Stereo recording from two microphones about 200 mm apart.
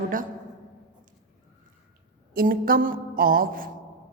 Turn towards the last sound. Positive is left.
turn(degrees=-45)  # may be behind; listen again after turning